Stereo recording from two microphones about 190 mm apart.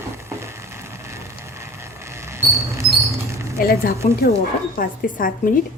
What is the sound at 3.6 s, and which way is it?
A woman's voice, 50° left (ahead or behind).